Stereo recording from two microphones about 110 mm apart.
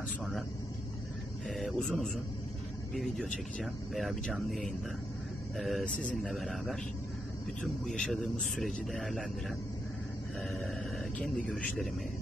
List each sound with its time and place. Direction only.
1.5 s speech: 5° left (ahead or behind)
11.1 s a man's voice: 10° left (ahead or behind)